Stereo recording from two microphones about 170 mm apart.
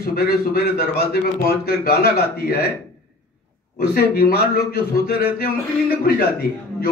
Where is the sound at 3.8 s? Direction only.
65° left (ahead or behind).